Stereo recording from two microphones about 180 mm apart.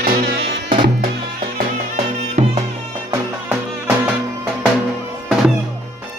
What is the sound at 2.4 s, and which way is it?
Music, 35° right (ahead or behind).